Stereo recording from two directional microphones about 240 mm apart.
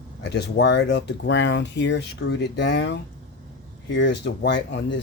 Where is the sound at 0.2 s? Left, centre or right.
Left.